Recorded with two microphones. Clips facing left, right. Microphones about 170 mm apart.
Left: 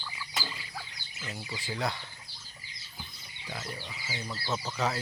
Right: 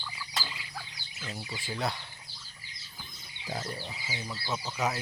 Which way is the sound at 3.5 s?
35° right (ahead or behind).